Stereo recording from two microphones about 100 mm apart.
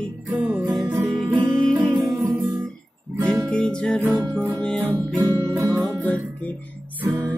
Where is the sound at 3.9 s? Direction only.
20° right (ahead or behind).